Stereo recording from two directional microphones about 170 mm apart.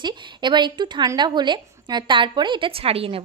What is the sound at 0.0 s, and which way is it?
A woman's voice, 25° right (ahead or behind).